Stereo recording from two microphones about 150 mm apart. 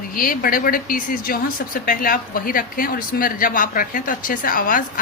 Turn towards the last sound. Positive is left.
turn(degrees=65)  # may be behind; listen again after turning